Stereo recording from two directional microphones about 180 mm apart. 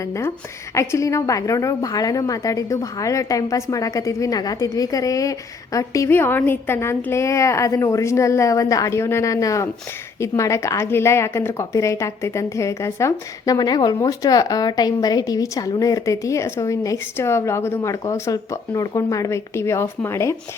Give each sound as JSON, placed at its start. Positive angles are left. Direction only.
{"t": 0.0, "sound": "a woman's voice", "side_deg": 15}